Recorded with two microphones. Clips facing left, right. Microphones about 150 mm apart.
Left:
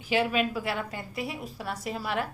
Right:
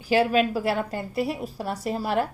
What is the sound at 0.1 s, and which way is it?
A woman's voice, 40° right (ahead or behind).